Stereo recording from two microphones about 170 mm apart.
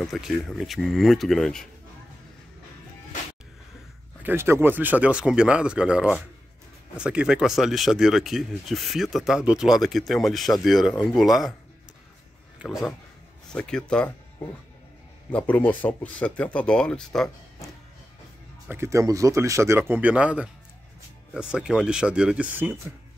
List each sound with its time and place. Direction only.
0.0 s speech: centre (ahead or behind)
4.2 s speech: 10° right (ahead or behind)
12.6 s speech: centre (ahead or behind)
18.7 s speech: 15° right (ahead or behind)